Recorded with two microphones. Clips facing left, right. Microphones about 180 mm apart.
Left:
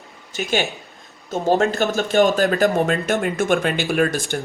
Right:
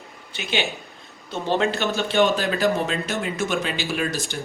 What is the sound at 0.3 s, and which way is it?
A man's voice, 45° left (ahead or behind).